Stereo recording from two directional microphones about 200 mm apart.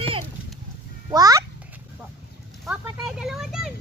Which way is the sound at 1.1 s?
20° right (ahead or behind).